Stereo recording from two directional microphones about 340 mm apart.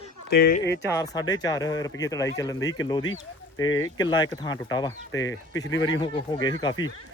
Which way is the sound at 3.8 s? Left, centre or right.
Centre.